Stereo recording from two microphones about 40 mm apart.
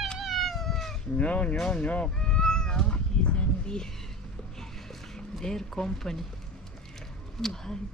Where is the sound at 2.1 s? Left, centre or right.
Centre.